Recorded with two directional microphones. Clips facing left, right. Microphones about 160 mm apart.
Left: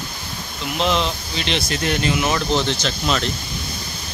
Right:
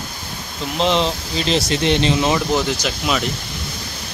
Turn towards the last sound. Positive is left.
turn(degrees=-10)  # may be behind; listen again after turning